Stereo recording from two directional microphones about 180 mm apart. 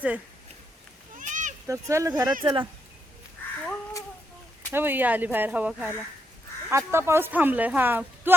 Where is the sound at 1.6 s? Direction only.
15° right (ahead or behind).